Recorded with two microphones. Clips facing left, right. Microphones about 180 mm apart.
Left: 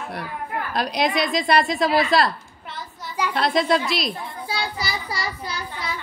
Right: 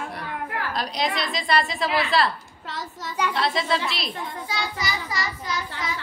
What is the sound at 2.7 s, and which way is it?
Child singing, 90° right.